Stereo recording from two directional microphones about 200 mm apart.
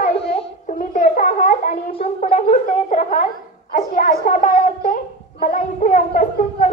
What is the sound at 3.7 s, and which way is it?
A child's voice, 40° left (ahead or behind).